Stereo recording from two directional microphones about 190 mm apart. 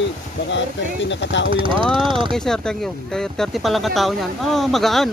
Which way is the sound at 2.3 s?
5° left (ahead or behind).